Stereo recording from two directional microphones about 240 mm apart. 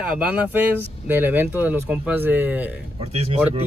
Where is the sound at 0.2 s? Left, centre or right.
Centre.